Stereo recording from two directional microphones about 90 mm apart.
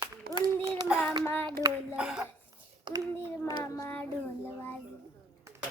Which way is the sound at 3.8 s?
25° left (ahead or behind).